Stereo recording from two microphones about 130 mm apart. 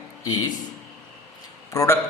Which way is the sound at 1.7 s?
25° left (ahead or behind).